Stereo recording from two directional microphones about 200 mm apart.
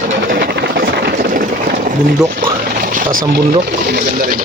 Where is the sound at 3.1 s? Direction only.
90° right.